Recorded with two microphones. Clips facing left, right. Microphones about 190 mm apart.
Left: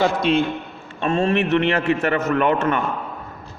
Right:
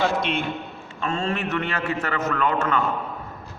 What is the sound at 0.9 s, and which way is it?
A man's voice, 25° left (ahead or behind).